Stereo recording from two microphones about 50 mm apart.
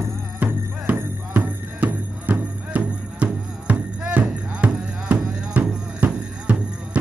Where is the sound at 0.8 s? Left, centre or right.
Right.